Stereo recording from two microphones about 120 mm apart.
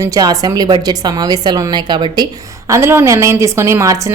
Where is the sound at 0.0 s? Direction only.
30° right (ahead or behind).